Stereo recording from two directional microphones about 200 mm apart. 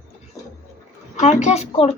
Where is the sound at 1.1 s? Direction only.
35° left (ahead or behind).